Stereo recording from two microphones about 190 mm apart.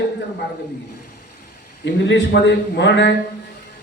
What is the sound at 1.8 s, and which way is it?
A man's voice, 70° left (ahead or behind).